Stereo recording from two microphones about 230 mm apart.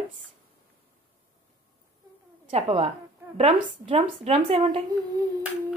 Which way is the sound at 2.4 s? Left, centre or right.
Right.